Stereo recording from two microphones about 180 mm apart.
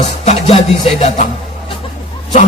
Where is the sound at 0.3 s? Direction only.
35° left (ahead or behind).